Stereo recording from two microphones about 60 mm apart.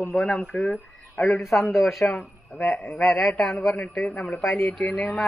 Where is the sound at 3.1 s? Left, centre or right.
Centre.